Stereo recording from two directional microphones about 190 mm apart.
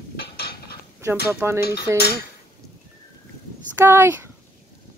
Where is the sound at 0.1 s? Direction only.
55° left (ahead or behind).